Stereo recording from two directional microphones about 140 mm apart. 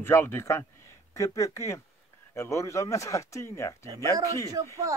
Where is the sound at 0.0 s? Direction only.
15° left (ahead or behind).